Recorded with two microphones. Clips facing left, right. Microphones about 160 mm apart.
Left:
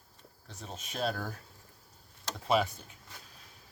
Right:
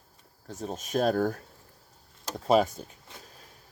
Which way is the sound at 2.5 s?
40° right (ahead or behind).